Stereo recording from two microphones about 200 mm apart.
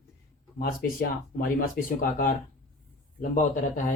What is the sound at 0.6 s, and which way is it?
Speech, 45° left (ahead or behind).